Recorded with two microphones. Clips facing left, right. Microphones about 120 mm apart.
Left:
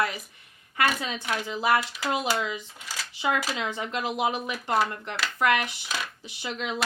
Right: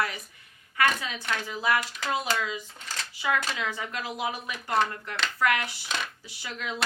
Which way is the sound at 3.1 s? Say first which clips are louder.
Left 2 dB; 20° left (ahead or behind).